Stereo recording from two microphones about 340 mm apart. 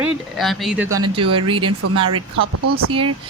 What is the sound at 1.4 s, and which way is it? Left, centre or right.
Speech, centre.